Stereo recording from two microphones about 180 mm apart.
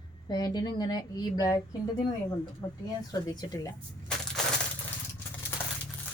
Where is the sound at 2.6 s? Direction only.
15° left (ahead or behind).